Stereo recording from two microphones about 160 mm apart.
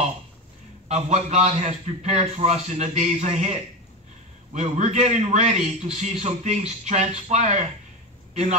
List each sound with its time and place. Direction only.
0.8 s a man's voice: 45° right (ahead or behind)
4.6 s a man's voice: 45° right (ahead or behind)